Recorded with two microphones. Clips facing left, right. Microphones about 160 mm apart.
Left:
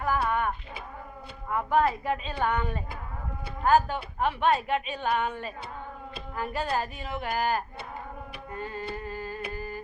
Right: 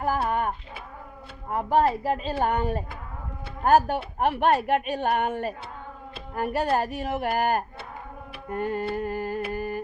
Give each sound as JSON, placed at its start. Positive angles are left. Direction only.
{"t": 0.0, "sound": "a woman's voice", "side_deg": -35}
{"t": 9.5, "sound": "music", "side_deg": -60}